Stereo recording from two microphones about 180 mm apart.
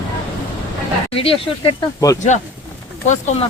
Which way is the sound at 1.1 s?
30° left (ahead or behind).